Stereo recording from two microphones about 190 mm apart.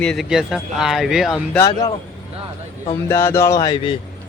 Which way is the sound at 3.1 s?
15° left (ahead or behind).